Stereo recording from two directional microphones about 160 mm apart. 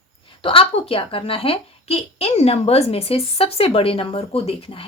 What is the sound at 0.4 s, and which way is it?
Speech, 35° left (ahead or behind).